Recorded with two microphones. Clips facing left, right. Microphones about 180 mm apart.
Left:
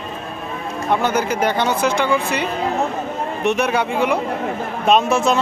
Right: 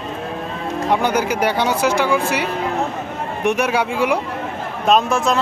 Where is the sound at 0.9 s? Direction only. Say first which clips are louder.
Even; 10° right (ahead or behind).